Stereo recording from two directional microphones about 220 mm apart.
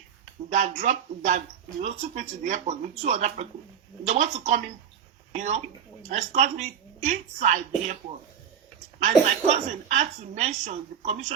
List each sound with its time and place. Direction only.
0.5 s a woman's voice: 30° right (ahead or behind)
9.0 s a woman's voice: 30° right (ahead or behind)